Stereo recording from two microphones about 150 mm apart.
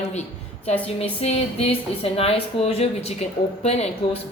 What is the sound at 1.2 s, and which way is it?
Speech, 40° left (ahead or behind).